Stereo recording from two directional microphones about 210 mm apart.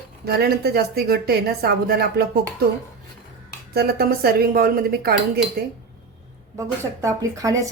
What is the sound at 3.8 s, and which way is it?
Speech, 50° right (ahead or behind).